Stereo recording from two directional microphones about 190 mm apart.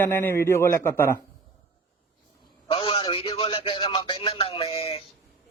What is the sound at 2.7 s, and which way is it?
A man's voice, 30° left (ahead or behind).